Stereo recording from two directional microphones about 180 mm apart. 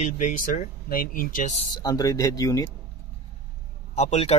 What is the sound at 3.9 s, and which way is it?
Speech, 35° left (ahead or behind).